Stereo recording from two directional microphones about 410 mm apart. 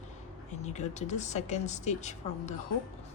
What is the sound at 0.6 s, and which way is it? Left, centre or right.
Speech, centre.